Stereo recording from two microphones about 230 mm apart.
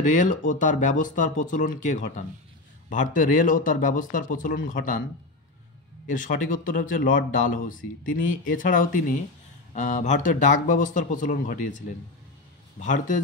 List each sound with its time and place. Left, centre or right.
0.0 s speech: left
6.0 s speech: left
12.8 s speech: left